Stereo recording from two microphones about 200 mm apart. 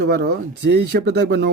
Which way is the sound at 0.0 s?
55° right (ahead or behind).